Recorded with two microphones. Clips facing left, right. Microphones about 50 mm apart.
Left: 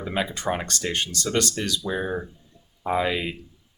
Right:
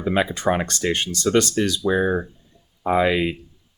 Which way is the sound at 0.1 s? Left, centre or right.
Right.